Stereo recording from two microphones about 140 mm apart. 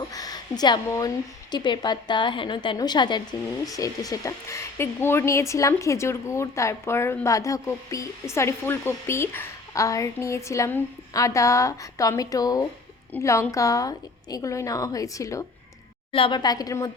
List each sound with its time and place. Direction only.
0.1 s speech: 25° left (ahead or behind)
16.1 s speech: 35° left (ahead or behind)